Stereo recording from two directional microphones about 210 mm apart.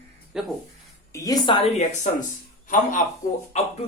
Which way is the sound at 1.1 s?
15° left (ahead or behind).